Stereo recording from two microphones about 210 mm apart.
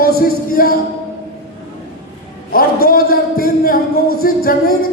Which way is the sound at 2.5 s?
45° left (ahead or behind).